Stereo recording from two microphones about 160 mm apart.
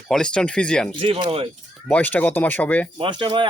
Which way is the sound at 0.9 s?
35° right (ahead or behind).